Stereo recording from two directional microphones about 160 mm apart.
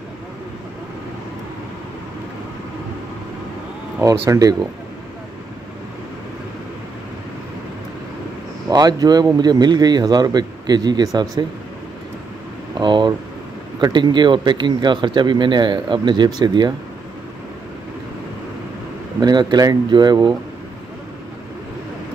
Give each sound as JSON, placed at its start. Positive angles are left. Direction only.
{"t": 4.0, "sound": "speech", "side_deg": -20}
{"t": 8.6, "sound": "speech", "side_deg": -25}
{"t": 12.7, "sound": "a sound", "side_deg": -30}
{"t": 13.7, "sound": "speech", "side_deg": -25}
{"t": 19.1, "sound": "speech", "side_deg": -25}